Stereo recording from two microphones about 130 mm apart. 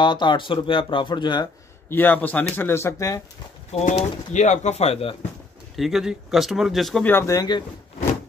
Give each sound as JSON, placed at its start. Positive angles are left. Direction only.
{"t": 0.0, "sound": "speech", "side_deg": 35}
{"t": 1.9, "sound": "speech", "side_deg": 15}
{"t": 3.7, "sound": "speech", "side_deg": 60}
{"t": 5.8, "sound": "speech", "side_deg": 0}
{"t": 7.1, "sound": "speech", "side_deg": 15}
{"t": 7.3, "sound": "speech", "side_deg": 35}